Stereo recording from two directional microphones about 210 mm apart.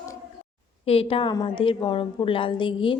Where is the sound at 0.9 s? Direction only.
25° left (ahead or behind).